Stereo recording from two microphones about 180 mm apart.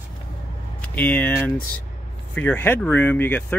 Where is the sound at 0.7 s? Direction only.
10° left (ahead or behind).